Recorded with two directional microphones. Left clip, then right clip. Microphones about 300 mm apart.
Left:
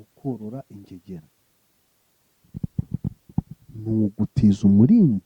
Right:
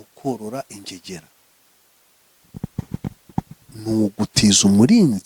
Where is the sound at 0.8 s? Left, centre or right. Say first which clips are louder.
Right 8 dB; centre.